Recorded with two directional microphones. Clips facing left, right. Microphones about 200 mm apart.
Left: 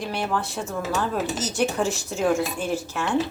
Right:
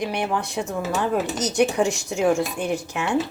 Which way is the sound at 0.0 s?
15° right (ahead or behind).